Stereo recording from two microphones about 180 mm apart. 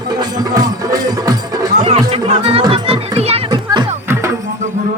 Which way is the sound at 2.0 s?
35° right (ahead or behind).